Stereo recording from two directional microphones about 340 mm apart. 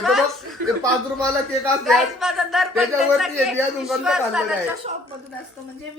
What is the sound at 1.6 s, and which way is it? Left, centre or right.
Speech, centre.